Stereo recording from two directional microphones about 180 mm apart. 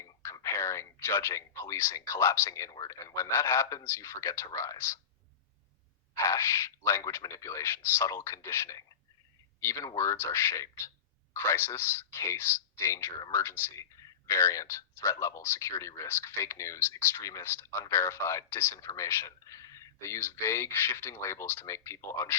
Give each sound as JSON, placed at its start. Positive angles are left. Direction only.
{"t": 0.0, "sound": "speech", "side_deg": 15}
{"t": 6.2, "sound": "speech", "side_deg": 15}